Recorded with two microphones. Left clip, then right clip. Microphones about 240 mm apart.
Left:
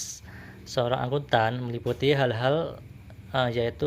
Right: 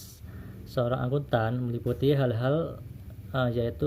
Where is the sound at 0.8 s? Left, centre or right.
Left.